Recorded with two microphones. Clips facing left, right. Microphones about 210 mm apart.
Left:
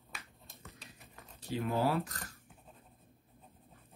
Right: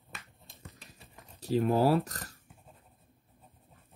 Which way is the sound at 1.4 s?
35° right (ahead or behind).